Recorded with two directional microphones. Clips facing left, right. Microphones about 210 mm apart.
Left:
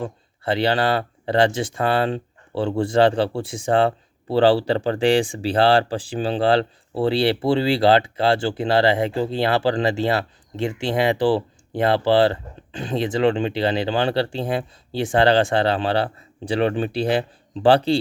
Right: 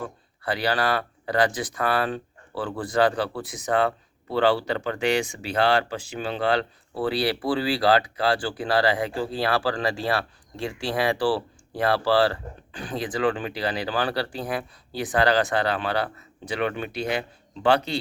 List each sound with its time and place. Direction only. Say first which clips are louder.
0.0 s speech: left 5 dB; 25° left (ahead or behind)